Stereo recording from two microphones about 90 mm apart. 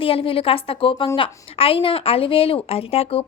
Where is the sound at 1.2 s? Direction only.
90° left.